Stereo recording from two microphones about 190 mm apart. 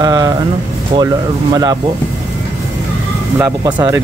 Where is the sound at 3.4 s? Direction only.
20° right (ahead or behind).